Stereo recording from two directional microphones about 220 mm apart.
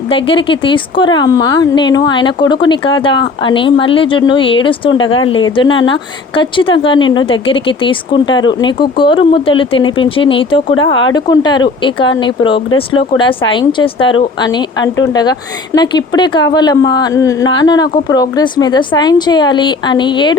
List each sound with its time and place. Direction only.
0.1 s speech: 25° left (ahead or behind)